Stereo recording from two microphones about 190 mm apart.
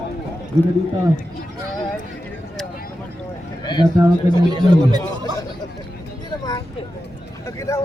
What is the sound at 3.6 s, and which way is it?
Speech, 25° left (ahead or behind).